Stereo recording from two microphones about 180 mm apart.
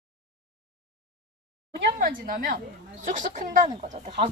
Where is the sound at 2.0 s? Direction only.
50° right (ahead or behind).